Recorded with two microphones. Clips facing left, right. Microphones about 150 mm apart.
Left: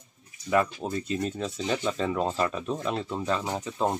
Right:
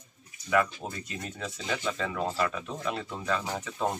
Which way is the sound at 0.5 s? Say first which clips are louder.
Left 2 dB; 30° left (ahead or behind).